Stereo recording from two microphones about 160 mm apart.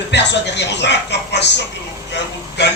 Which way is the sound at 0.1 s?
90° left.